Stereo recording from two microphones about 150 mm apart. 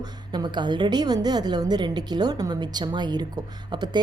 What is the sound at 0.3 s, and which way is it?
A woman's voice, 30° right (ahead or behind).